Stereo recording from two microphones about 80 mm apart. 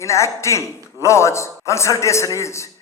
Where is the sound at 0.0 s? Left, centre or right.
Left.